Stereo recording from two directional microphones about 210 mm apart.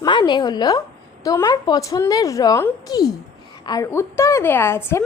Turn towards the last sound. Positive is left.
turn(degrees=10)  # may be behind; listen again after turning